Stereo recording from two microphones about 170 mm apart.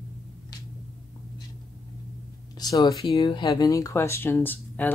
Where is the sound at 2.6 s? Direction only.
20° left (ahead or behind).